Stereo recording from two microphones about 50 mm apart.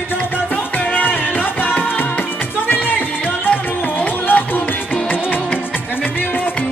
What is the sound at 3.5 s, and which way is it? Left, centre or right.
Music, left.